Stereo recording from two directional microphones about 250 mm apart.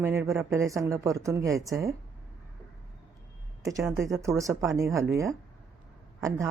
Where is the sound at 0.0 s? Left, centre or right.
Centre.